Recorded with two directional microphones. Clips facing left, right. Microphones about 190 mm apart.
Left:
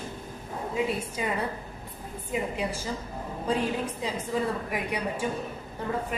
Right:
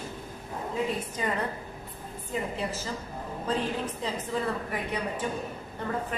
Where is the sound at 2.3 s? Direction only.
10° left (ahead or behind).